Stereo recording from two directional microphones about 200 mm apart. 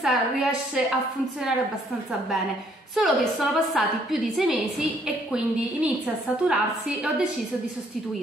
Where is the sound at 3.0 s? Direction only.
Centre (ahead or behind).